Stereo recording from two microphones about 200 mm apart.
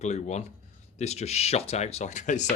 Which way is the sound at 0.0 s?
35° left (ahead or behind).